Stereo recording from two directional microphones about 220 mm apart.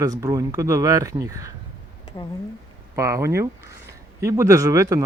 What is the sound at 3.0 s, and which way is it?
Speech, 15° right (ahead or behind).